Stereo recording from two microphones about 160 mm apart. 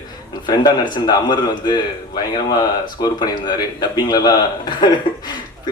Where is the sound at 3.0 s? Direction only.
25° left (ahead or behind).